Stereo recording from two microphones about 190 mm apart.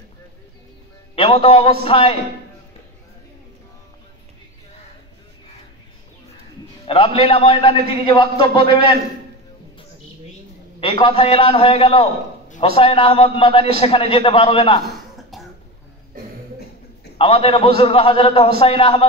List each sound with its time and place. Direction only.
1.1 s a man's voice: 30° left (ahead or behind)
6.9 s a man's voice: 30° left (ahead or behind)
10.8 s a man's voice: 30° left (ahead or behind)
15.3 s cough: centre (ahead or behind)
16.1 s cough: 45° right (ahead or behind)
17.2 s a man's voice: 30° left (ahead or behind)